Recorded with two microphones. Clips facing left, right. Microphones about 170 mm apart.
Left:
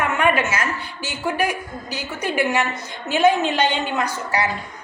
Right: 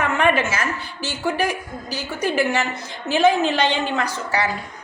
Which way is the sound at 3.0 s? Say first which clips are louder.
Even; 30° right (ahead or behind).